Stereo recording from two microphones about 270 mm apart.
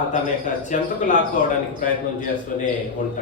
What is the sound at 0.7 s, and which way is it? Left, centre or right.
Speech, left.